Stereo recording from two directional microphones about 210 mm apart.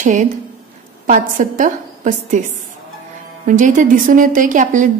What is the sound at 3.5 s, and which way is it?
A woman's voice, 35° right (ahead or behind).